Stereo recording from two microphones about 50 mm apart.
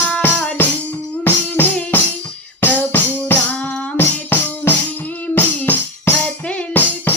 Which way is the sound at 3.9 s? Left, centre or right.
Left.